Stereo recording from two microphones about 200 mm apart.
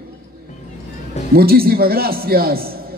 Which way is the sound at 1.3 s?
50° right (ahead or behind).